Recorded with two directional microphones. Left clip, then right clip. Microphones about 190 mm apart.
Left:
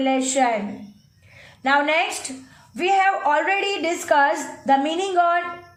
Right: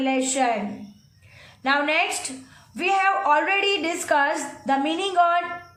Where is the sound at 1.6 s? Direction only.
15° left (ahead or behind).